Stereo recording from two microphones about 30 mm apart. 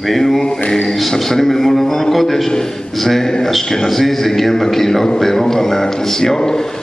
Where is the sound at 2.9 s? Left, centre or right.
Centre.